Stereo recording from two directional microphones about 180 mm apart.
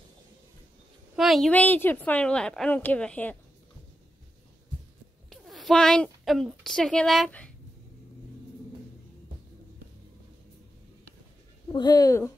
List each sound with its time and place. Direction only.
1.1 s a woman's voice: centre (ahead or behind)
5.3 s a sound: centre (ahead or behind)
6.6 s speech: 5° left (ahead or behind)
11.7 s speech: 20° left (ahead or behind)